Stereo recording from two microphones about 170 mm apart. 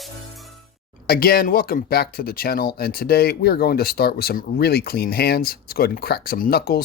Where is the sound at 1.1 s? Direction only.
60° left (ahead or behind).